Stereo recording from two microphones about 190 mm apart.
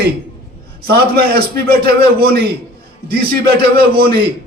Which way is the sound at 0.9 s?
55° right (ahead or behind).